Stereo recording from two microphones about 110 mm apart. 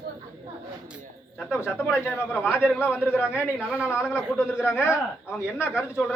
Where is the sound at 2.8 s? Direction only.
20° left (ahead or behind).